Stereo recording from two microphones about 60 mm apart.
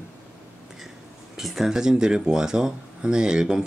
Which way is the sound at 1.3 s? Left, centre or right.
Centre.